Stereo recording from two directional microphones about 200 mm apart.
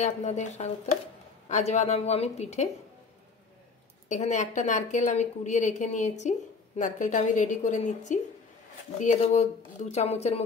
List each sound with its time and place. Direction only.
0.0 s a woman's voice: 35° left (ahead or behind)
4.1 s a woman's voice: 35° left (ahead or behind)